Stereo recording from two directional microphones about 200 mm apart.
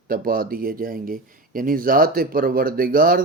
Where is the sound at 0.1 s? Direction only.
45° right (ahead or behind).